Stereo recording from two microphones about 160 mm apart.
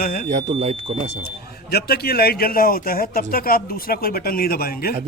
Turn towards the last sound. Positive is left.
turn(degrees=70)  # may be behind; listen again after turning